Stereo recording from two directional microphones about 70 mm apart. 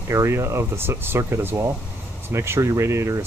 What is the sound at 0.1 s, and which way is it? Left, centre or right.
Speech, right.